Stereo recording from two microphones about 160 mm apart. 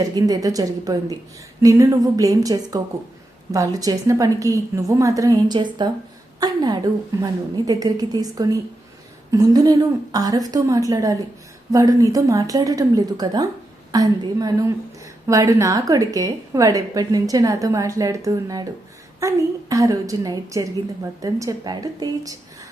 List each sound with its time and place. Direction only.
0.0 s a woman's voice: 25° right (ahead or behind)